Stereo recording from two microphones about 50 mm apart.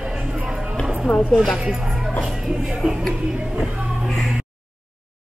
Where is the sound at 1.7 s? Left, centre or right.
Centre.